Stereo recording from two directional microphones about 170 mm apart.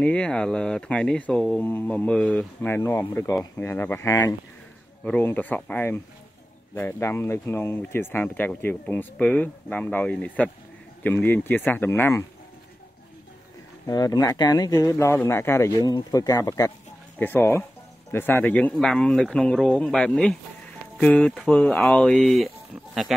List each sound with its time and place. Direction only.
0.0 s speech: 5° left (ahead or behind)
13.8 s speech: 20° left (ahead or behind); by 22.5 s centre (ahead or behind)